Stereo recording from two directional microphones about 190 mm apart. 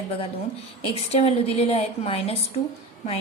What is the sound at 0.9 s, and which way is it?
A woman's voice, 35° left (ahead or behind).